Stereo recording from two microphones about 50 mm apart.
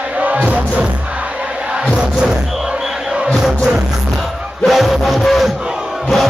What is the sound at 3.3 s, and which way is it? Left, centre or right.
Music, centre.